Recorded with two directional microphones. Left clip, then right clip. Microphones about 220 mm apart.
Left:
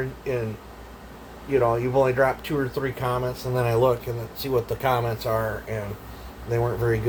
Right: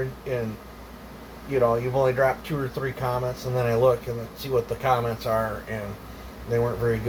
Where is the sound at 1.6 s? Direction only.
50° left (ahead or behind).